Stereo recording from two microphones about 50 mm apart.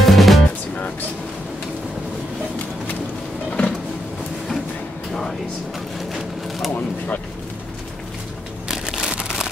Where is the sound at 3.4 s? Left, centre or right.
Centre.